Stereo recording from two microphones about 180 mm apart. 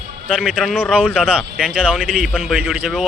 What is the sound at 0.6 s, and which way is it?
Speech, centre (ahead or behind).